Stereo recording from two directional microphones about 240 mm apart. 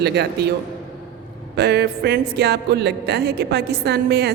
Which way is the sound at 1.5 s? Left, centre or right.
Right.